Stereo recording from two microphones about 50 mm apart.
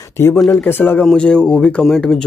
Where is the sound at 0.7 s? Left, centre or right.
Left.